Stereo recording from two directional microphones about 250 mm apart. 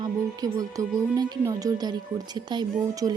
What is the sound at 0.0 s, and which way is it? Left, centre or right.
Speech, centre.